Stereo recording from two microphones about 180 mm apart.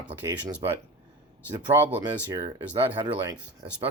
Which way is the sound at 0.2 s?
15° right (ahead or behind).